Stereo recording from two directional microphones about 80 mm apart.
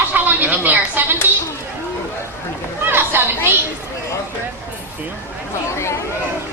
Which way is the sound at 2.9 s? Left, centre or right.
Right.